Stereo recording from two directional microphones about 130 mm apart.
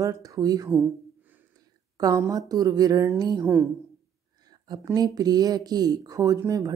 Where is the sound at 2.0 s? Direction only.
30° right (ahead or behind).